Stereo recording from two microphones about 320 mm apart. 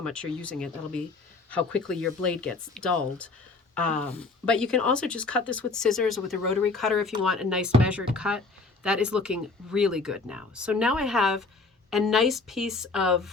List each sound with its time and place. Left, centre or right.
0.0 s speech: centre